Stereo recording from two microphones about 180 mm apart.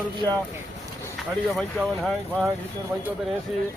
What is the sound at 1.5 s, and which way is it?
Speech, centre (ahead or behind).